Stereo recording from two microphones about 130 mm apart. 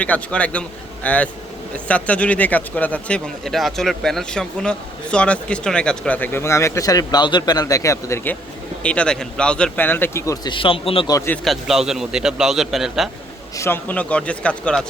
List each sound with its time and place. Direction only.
0.0 s speech: 10° left (ahead or behind)
10.4 s a man's voice: 40° left (ahead or behind)
11.4 s a man's voice: centre (ahead or behind)
13.6 s speech: 15° left (ahead or behind)